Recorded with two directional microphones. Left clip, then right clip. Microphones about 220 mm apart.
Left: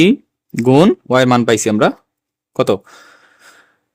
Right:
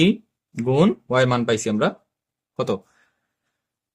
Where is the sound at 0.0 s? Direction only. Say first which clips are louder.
Left 8 dB; 45° left (ahead or behind).